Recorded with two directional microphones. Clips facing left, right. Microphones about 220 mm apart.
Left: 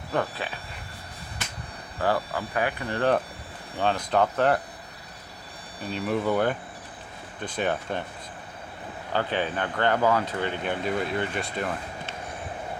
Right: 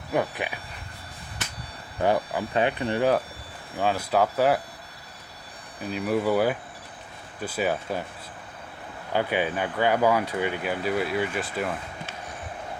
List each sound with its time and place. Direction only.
0.1 s speech: 15° right (ahead or behind)
2.0 s speech: 20° right (ahead or behind)
3.8 s speech: 5° right (ahead or behind)
5.8 s speech: 5° right (ahead or behind)
9.1 s speech: 10° right (ahead or behind)